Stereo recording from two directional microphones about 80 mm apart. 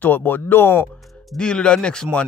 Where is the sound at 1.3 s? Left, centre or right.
Centre.